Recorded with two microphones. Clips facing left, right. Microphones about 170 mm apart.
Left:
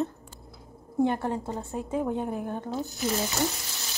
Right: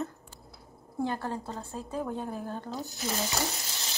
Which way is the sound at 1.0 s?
20° left (ahead or behind).